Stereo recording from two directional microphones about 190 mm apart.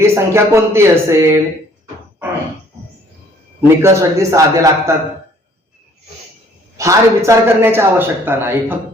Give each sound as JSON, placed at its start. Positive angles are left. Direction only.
{"t": 0.0, "sound": "a man's voice", "side_deg": -15}
{"t": 3.6, "sound": "a man's voice", "side_deg": -15}
{"t": 6.7, "sound": "a man's voice", "side_deg": -15}